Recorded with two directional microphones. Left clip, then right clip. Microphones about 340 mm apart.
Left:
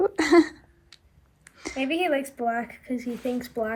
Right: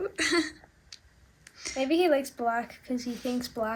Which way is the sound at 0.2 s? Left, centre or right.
Centre.